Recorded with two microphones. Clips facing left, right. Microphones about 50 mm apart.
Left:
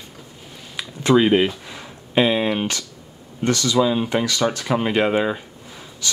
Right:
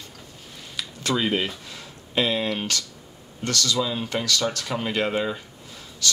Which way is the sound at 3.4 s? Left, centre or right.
Left.